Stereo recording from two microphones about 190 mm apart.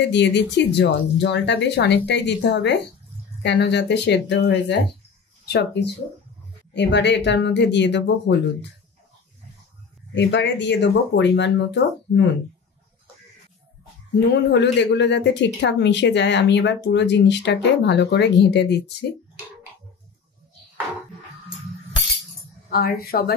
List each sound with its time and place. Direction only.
0.0 s speech: 65° left (ahead or behind)
10.1 s speech: 70° left (ahead or behind)
14.3 s speech: 65° left (ahead or behind)
22.7 s a woman's voice: 55° left (ahead or behind)